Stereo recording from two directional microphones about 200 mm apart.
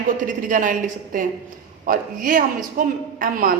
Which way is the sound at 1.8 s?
45° right (ahead or behind).